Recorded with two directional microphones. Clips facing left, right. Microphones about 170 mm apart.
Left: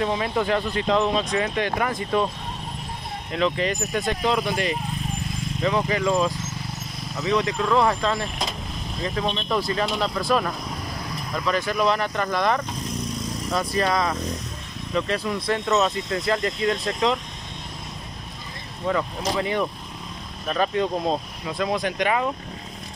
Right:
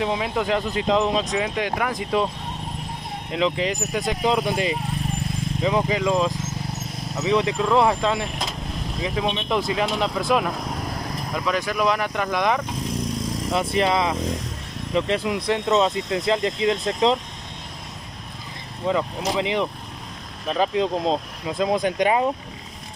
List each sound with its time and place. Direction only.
0.0 s speech: 10° right (ahead or behind)
3.3 s speech: 5° right (ahead or behind)
13.6 s speech: 20° right (ahead or behind)
18.9 s speech: 15° right (ahead or behind)
21.0 s speech: 20° right (ahead or behind)